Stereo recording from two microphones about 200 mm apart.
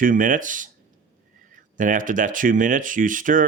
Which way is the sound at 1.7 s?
40° right (ahead or behind).